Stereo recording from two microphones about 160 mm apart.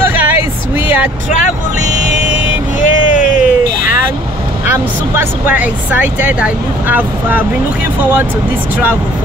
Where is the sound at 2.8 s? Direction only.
50° left (ahead or behind).